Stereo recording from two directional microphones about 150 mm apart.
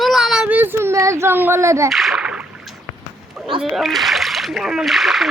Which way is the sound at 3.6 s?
Centre (ahead or behind).